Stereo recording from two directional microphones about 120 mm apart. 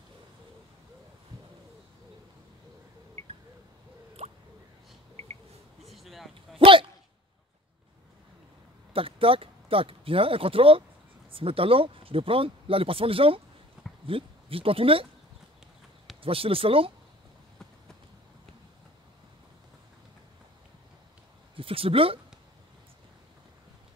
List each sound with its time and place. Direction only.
4.2 s a sound: 65° right (ahead or behind)
5.9 s a sound: centre (ahead or behind)
6.3 s dog: 45° right (ahead or behind)
8.9 s speech: 50° right (ahead or behind)
16.2 s speech: 50° right (ahead or behind)
21.5 s speech: 50° right (ahead or behind)